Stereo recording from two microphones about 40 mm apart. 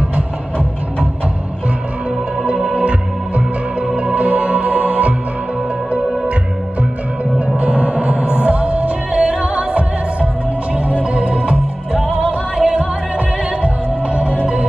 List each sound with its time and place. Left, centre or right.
2.5 s music: centre
2.8 s music: right
7.3 s music: right
14.0 s music: right